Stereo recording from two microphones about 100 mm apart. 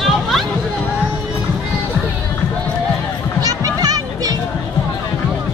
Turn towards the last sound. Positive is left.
turn(degrees=-40)  # may be behind; listen again after turning